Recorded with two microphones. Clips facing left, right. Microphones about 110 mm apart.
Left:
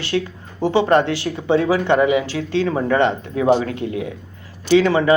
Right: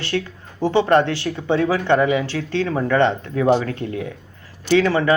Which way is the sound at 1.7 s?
15° left (ahead or behind).